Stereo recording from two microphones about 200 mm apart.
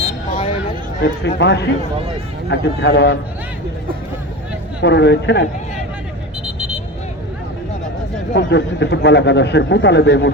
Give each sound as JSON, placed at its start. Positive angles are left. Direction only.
{"t": 1.0, "sound": "a man's voice", "side_deg": 60}
{"t": 4.8, "sound": "a man's voice", "side_deg": 60}
{"t": 8.3, "sound": "a man's voice", "side_deg": 60}